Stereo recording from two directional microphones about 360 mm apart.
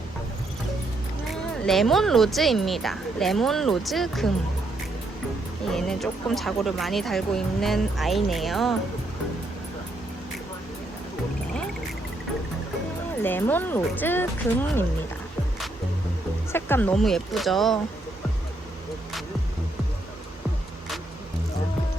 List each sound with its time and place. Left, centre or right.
1.6 s speech: centre
5.7 s speech: centre
13.2 s speech: centre
16.5 s speech: centre